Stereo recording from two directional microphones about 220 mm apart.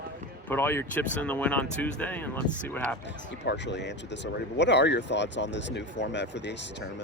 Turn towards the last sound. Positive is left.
turn(degrees=55)  # may be behind; listen again after turning